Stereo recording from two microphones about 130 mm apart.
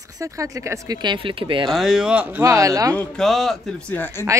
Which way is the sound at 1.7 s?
Centre (ahead or behind).